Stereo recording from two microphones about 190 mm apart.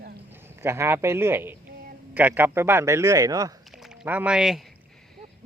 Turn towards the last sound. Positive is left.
turn(degrees=-5)  # may be behind; listen again after turning